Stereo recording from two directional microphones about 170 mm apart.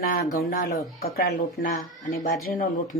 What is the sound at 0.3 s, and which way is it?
Speech, 55° left (ahead or behind).